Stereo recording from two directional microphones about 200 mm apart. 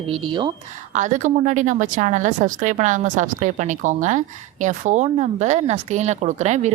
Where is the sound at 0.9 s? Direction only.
40° right (ahead or behind).